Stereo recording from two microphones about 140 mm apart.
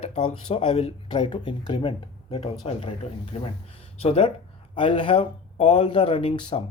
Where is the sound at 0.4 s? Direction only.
35° left (ahead or behind).